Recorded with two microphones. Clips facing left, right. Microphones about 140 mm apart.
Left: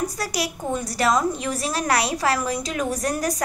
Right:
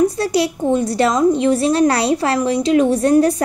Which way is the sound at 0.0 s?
25° right (ahead or behind).